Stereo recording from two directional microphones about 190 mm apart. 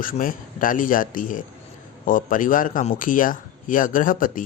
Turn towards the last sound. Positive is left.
turn(degrees=45)  # may be behind; listen again after turning